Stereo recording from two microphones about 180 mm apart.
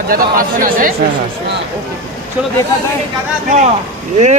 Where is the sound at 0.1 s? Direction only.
55° right (ahead or behind).